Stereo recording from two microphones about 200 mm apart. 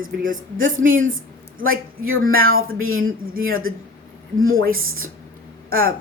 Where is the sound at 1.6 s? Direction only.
90° right.